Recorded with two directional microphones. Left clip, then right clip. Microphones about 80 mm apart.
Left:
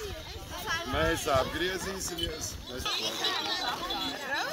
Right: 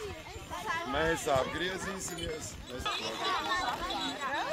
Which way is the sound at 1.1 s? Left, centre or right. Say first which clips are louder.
Left 2 dB; centre.